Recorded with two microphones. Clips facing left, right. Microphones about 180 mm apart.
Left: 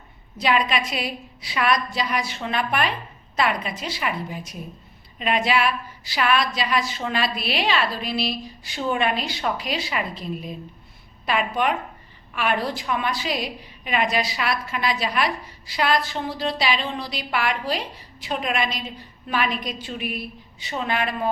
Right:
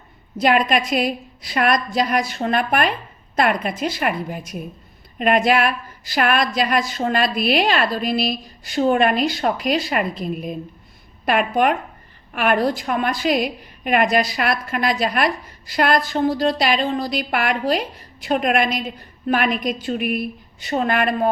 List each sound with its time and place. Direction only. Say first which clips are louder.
0.3 s a woman's voice: right 5 dB; 50° right (ahead or behind)